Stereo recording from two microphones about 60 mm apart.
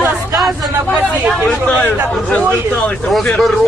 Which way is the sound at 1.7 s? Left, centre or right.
Left.